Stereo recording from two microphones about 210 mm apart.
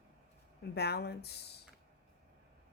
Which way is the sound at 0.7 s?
50° left (ahead or behind).